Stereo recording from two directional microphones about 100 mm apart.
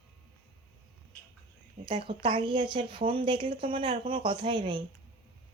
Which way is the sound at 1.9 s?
55° right (ahead or behind).